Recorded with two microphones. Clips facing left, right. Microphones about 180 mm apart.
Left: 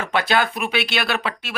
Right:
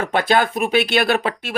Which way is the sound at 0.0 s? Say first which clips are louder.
Right 3 dB; 50° right (ahead or behind).